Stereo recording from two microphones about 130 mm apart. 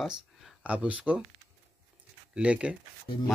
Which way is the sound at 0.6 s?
10° right (ahead or behind).